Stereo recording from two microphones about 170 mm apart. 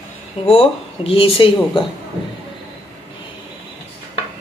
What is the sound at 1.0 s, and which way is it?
Speech, 35° left (ahead or behind).